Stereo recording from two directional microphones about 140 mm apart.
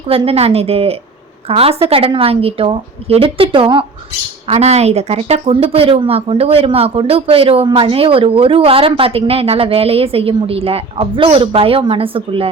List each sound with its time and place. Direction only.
0.1 s speech: 45° right (ahead or behind)
4.4 s speech: 50° right (ahead or behind)